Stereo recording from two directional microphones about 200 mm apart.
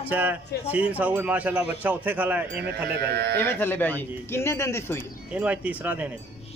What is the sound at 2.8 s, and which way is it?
Speech, 55° right (ahead or behind).